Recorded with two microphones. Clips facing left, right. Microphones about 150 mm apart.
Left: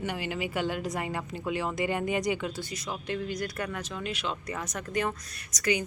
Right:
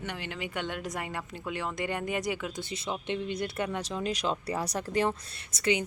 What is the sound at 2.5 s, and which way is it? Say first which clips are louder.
Speech: right 1 dB; 25° right (ahead or behind).